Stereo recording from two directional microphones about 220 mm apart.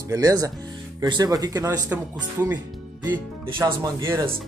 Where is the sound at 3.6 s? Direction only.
15° right (ahead or behind).